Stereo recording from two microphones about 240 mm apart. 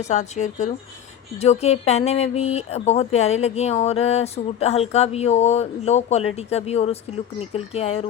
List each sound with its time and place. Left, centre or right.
0.0 s speech: left